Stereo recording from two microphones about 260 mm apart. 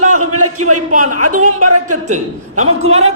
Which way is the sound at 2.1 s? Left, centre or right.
Right.